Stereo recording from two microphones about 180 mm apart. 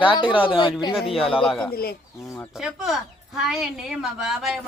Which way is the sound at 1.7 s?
60° left (ahead or behind).